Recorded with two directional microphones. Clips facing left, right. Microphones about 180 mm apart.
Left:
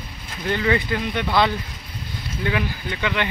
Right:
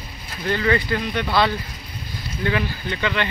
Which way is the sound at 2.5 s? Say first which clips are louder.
Right 1 dB; 10° left (ahead or behind).